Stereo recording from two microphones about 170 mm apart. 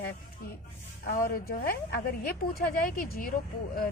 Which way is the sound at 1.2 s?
60° left (ahead or behind).